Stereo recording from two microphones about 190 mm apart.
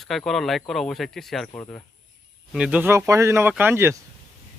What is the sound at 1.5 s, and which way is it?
Speech, 10° left (ahead or behind).